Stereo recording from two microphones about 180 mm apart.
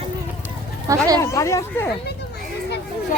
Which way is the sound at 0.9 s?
20° right (ahead or behind).